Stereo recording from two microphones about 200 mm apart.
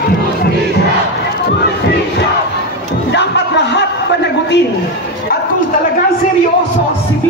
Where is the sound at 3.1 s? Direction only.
60° left (ahead or behind).